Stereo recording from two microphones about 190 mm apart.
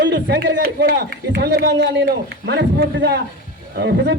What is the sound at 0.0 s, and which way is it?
A man's voice, 65° right (ahead or behind).